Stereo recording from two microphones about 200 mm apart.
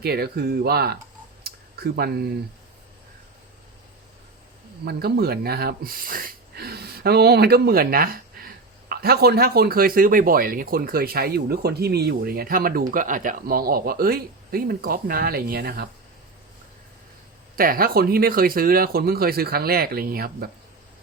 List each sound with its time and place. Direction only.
0.0 s speech: 55° right (ahead or behind)
1.5 s a sound: 50° right (ahead or behind)
4.9 s speech: 50° right (ahead or behind)
17.6 s speech: 45° right (ahead or behind)